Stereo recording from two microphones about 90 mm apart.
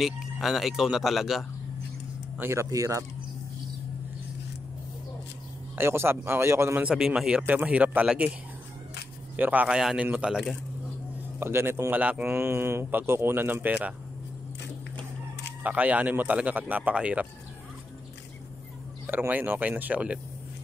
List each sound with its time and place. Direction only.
0.0 s speech: centre (ahead or behind)
2.5 s speech: 35° right (ahead or behind)
5.8 s speech: 25° right (ahead or behind)
6.8 s speech: 10° right (ahead or behind)
9.4 s speech: 20° right (ahead or behind)
9.8 s speech: 5° right (ahead or behind)
11.3 s speech: 30° right (ahead or behind)
12.4 s speech: 25° right (ahead or behind)
15.6 s speech: 15° right (ahead or behind)
19.0 s speech: 20° right (ahead or behind)